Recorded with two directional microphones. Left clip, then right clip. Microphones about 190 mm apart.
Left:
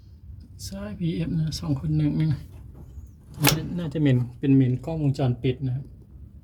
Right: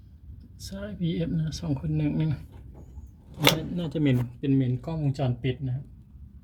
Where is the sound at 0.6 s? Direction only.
15° left (ahead or behind).